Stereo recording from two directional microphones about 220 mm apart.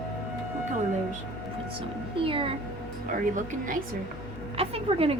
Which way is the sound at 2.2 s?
25° right (ahead or behind).